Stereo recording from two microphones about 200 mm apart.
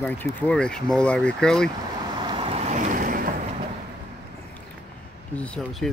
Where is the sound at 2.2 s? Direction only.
25° right (ahead or behind); by 3.2 s 45° right (ahead or behind).